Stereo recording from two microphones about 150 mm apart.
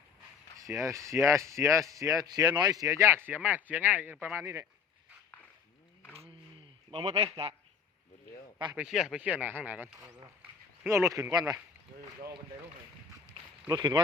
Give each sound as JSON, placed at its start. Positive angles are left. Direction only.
{"t": 0.6, "sound": "speech", "side_deg": -20}
{"t": 6.9, "sound": "a man's voice", "side_deg": -40}
{"t": 8.7, "sound": "speech", "side_deg": -5}
{"t": 13.7, "sound": "speech", "side_deg": -25}